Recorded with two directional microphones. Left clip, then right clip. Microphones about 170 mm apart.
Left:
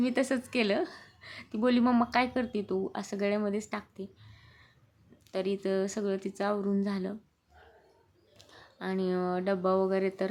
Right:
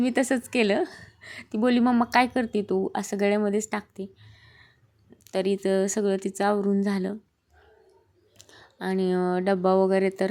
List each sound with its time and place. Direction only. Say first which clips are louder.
0.0 s a woman's voice: right 5 dB; 30° right (ahead or behind)
5.2 s speech: right 6 dB; 35° right (ahead or behind)
8.4 s speech: right 5 dB; 30° right (ahead or behind)